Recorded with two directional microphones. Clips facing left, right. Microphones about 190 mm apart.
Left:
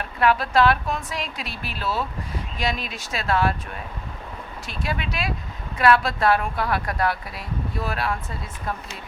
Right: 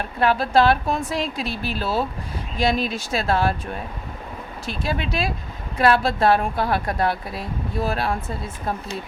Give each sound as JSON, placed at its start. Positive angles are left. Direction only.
{"t": 0.2, "sound": "a woman's voice", "side_deg": -30}
{"t": 4.8, "sound": "speech", "side_deg": -30}